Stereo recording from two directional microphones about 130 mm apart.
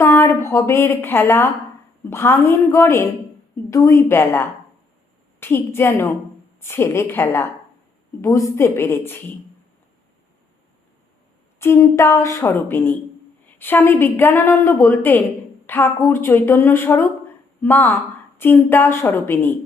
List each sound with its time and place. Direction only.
0.0 s a woman's voice: 20° left (ahead or behind)
11.6 s a woman's voice: 20° left (ahead or behind)